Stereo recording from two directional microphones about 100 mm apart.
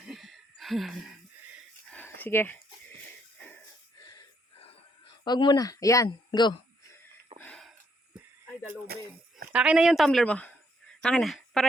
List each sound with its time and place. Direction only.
0.1 s a sound: centre (ahead or behind)
2.0 s speech: 20° left (ahead or behind)
3.9 s wheeze: 40° left (ahead or behind)
5.2 s speech: 45° left (ahead or behind)
6.1 s speech: 50° left (ahead or behind)
7.3 s wheeze: 85° right
9.5 s speech: 10° right (ahead or behind)
10.2 s speech: 15° left (ahead or behind)